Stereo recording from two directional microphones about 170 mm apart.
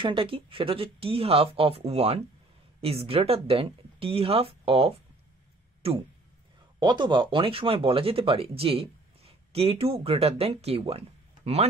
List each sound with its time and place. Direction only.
0.0 s speech: 30° right (ahead or behind)